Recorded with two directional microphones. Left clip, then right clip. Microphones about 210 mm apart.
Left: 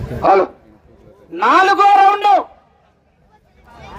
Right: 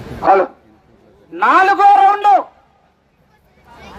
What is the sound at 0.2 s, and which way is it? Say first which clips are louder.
Speech: even; 15° left (ahead or behind).